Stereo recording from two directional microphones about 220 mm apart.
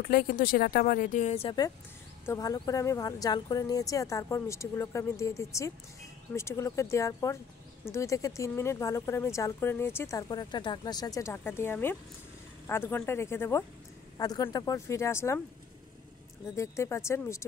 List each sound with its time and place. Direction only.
0.1 s speech: 40° left (ahead or behind); by 15.4 s 10° left (ahead or behind)
16.5 s speech: 15° left (ahead or behind)